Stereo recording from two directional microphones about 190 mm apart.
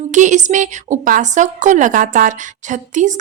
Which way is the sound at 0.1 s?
40° right (ahead or behind).